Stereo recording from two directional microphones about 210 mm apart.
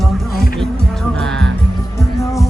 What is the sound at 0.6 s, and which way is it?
Music, centre (ahead or behind).